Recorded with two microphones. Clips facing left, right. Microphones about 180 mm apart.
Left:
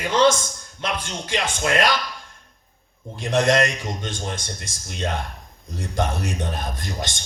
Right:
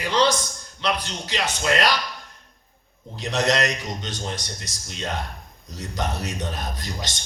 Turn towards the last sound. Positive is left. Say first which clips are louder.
# left 3 dB
turn(degrees=50)  # may be behind; listen again after turning